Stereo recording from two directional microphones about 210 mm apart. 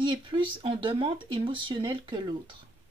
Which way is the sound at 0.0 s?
20° right (ahead or behind).